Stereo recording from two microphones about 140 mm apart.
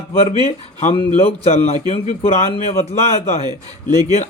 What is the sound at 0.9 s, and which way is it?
Speech, 45° left (ahead or behind).